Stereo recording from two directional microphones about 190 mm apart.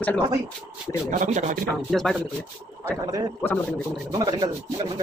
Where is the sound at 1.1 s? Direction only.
40° right (ahead or behind).